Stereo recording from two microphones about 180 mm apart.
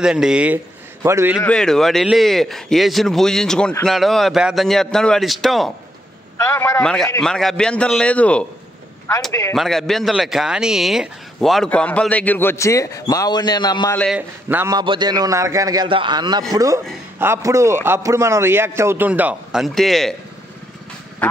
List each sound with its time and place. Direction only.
0.0 s a man's voice: 5° right (ahead or behind)
1.4 s speech: 5° left (ahead or behind)
6.3 s a man's voice: 15° left (ahead or behind)
9.5 s speech: centre (ahead or behind); by 13.9 s 25° left (ahead or behind)
14.1 s a man's voice: 10° right (ahead or behind)
14.8 s a man's voice: 25° right (ahead or behind); by 20.2 s centre (ahead or behind)